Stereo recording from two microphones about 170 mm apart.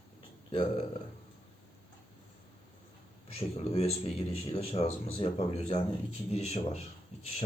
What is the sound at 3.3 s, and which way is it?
Speech, 35° left (ahead or behind).